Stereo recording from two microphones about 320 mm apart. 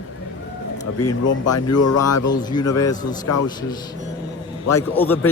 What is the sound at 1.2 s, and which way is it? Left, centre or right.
Speech, left.